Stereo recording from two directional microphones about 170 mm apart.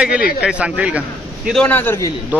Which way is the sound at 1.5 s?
10° left (ahead or behind).